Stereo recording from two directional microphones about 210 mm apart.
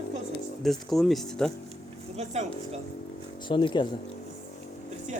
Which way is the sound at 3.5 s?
25° left (ahead or behind).